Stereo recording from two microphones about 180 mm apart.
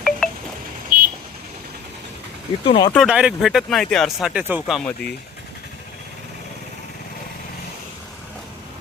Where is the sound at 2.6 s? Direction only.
30° left (ahead or behind).